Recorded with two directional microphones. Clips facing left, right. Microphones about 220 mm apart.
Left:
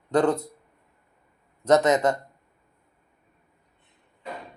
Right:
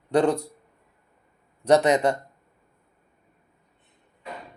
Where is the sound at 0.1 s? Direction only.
15° right (ahead or behind).